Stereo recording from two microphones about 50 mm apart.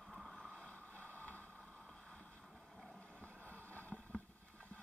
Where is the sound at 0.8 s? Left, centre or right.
Right.